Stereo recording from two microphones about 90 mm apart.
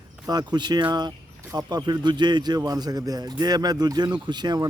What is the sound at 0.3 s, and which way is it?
Speech, 50° right (ahead or behind).